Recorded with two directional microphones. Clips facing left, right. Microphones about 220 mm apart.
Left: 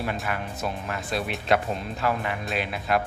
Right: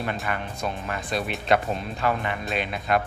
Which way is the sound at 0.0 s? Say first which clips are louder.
Even; 5° left (ahead or behind).